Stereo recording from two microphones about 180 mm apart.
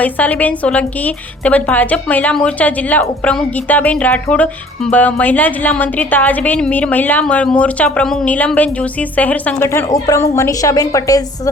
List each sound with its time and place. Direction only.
0.0 s a woman's voice: 10° left (ahead or behind)